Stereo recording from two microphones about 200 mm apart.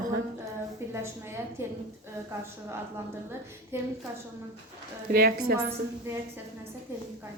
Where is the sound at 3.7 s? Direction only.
10° right (ahead or behind).